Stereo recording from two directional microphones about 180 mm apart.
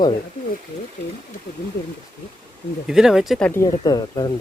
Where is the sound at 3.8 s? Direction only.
20° left (ahead or behind).